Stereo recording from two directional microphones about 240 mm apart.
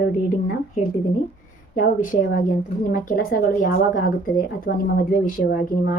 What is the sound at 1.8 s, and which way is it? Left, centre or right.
A woman's voice, left.